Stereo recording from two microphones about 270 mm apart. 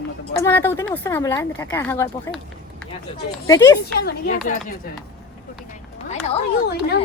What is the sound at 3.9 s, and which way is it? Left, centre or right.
Speech, left.